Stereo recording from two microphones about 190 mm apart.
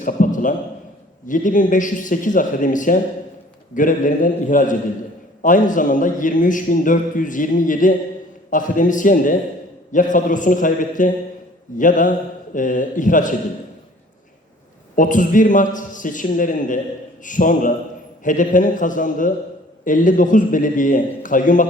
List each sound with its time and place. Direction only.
0.0 s a sound: 45° left (ahead or behind)
1.3 s a man's voice: 45° left (ahead or behind)
14.9 s a man's voice: 45° left (ahead or behind)